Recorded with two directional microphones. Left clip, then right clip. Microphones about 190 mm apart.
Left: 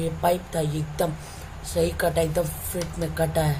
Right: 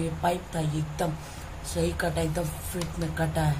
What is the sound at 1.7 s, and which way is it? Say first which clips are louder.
Speech: left 5 dB; 25° left (ahead or behind).